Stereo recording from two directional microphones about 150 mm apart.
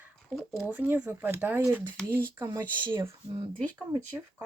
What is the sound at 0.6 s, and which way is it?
Speech, 10° right (ahead or behind).